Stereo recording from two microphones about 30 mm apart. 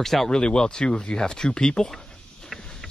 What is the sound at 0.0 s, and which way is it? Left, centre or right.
Speech, centre.